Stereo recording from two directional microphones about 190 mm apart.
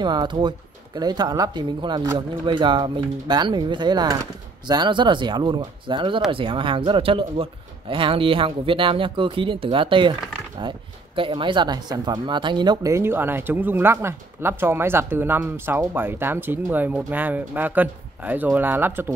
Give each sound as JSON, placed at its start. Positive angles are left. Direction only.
{"t": 0.0, "sound": "speech", "side_deg": -25}
{"t": 11.1, "sound": "speech", "side_deg": -25}